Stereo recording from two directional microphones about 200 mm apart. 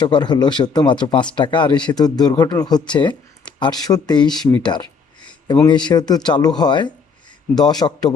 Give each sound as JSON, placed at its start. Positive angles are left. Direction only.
{"t": 0.0, "sound": "speech", "side_deg": 20}
{"t": 4.3, "sound": "speech", "side_deg": 0}
{"t": 4.6, "sound": "speech", "side_deg": 20}